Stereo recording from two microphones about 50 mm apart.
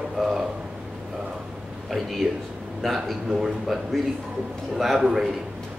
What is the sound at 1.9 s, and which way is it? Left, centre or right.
A man's voice, centre.